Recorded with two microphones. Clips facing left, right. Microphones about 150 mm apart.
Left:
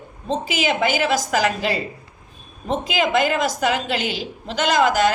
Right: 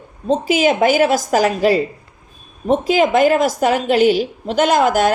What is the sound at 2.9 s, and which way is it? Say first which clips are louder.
A woman's voice: right 6 dB; 45° right (ahead or behind).